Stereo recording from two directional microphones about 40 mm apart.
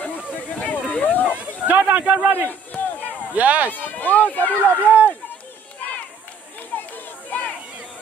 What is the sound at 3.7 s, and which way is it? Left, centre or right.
Speech, left.